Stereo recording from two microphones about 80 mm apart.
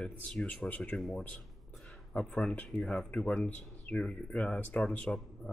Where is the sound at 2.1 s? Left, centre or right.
Centre.